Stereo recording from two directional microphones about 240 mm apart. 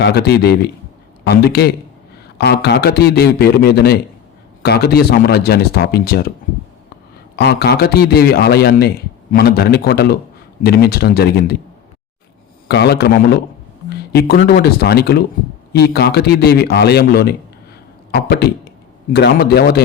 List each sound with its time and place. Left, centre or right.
0.0 s speech: left
7.3 s speech: left
12.6 s speech: left